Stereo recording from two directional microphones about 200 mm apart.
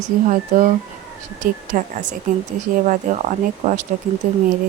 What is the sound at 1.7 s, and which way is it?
Speech, 40° right (ahead or behind).